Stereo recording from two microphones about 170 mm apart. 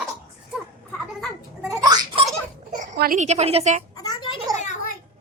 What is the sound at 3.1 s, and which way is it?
Speech, 40° right (ahead or behind).